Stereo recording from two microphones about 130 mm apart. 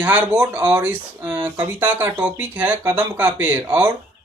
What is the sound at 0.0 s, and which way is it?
Speech, 10° right (ahead or behind).